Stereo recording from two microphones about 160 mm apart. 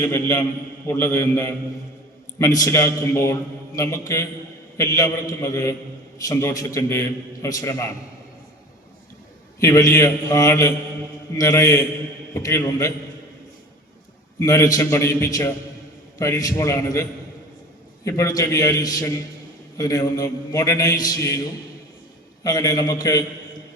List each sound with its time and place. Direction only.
0.0 s a man's voice: 15° left (ahead or behind)
9.6 s a man's voice: 20° left (ahead or behind)
14.3 s a man's voice: 20° left (ahead or behind)
22.4 s a man's voice: 25° left (ahead or behind)